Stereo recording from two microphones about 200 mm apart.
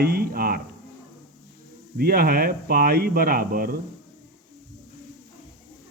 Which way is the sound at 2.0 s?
50° right (ahead or behind).